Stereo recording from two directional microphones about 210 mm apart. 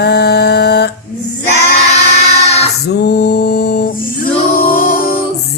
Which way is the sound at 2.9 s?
50° left (ahead or behind).